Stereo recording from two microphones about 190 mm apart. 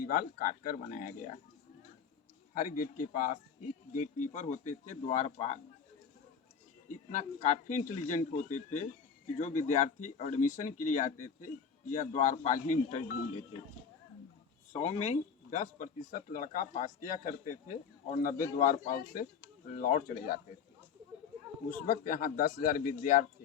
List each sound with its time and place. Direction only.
0.0 s speech: 45° left (ahead or behind)
2.6 s speech: 45° left (ahead or behind)
7.1 s speech: 40° left (ahead or behind)
14.7 s speech: 35° left (ahead or behind)
21.7 s speech: 45° left (ahead or behind)